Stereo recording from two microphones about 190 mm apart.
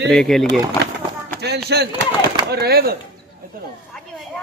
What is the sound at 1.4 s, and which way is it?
Speech, 60° right (ahead or behind).